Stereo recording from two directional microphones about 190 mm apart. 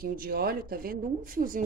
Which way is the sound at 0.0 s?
50° right (ahead or behind).